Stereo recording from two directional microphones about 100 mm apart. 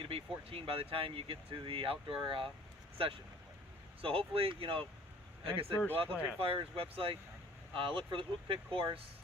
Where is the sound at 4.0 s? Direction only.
70° right (ahead or behind).